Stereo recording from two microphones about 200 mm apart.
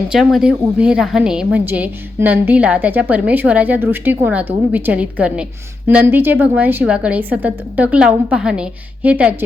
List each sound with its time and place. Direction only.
0.1 s a woman's voice: centre (ahead or behind)